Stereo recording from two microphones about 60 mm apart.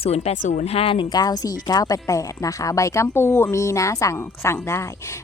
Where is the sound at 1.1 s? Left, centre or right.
Left.